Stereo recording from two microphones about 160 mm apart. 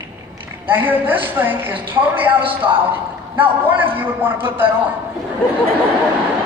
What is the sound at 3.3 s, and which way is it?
A man's voice, 10° right (ahead or behind).